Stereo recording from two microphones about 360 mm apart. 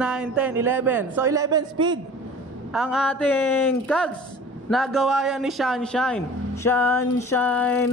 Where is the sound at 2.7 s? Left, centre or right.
Centre.